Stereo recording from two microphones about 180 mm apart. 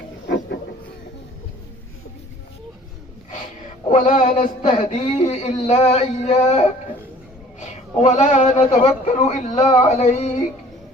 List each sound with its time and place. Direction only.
3.8 s a man's voice: 45° left (ahead or behind)